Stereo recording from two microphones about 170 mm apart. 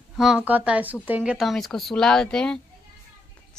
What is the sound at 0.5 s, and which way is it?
Speech, 10° right (ahead or behind).